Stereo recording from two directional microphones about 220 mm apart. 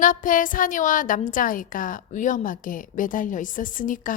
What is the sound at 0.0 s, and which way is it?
A woman's voice, 40° left (ahead or behind).